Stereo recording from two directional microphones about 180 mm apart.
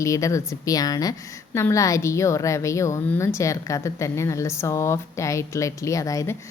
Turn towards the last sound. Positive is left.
turn(degrees=20)  # may be behind; listen again after turning